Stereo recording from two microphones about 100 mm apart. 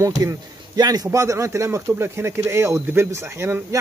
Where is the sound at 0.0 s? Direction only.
35° right (ahead or behind).